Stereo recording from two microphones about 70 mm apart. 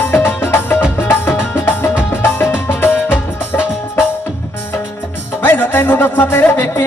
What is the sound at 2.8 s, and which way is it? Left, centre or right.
Music, left.